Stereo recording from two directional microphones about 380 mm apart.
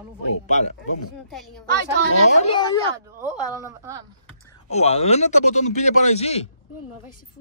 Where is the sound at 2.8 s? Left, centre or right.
Centre.